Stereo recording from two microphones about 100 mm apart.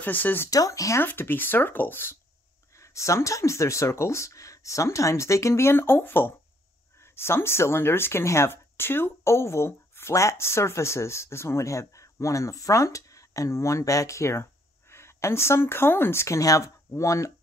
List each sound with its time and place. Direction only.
0.0 s speech: 20° left (ahead or behind)
0.5 s speech: 35° left (ahead or behind)
1.0 s speech: 20° left (ahead or behind)